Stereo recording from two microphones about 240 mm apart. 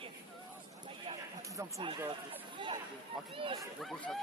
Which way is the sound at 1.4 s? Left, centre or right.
Centre.